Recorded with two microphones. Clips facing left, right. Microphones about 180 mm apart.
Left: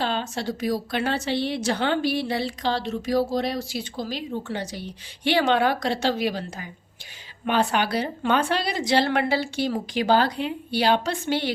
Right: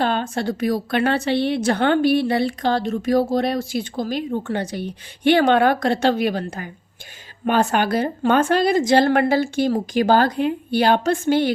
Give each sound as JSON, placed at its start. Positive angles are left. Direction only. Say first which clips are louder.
{"t": 0.0, "sound": "a woman's voice", "louder": "right 5 dB", "side_deg": -55}